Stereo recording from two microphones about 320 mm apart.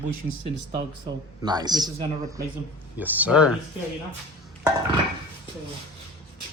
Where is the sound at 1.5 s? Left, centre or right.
Centre.